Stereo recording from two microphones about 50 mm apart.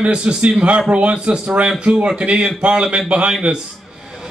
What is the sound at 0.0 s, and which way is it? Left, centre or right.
A man's voice, right.